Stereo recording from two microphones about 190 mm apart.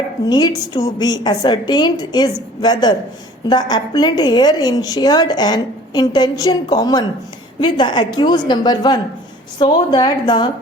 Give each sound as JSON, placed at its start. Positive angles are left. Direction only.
{"t": 0.3, "sound": "a woman's voice", "side_deg": 20}